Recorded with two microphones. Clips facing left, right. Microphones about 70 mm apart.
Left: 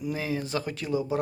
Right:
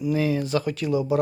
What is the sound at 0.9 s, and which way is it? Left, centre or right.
Speech, right.